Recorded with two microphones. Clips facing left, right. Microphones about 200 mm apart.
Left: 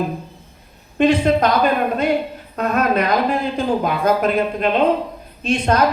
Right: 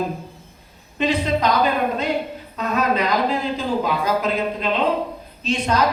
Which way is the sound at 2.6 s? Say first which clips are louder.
Left 3 dB; 55° left (ahead or behind).